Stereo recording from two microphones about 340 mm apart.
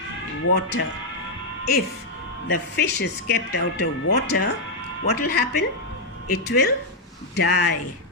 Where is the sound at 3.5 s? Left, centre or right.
Left.